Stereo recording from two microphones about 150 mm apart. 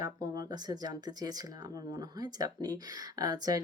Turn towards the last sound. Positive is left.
turn(degrees=-25)  # may be behind; listen again after turning